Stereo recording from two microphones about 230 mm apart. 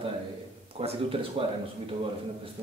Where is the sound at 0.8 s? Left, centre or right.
Right.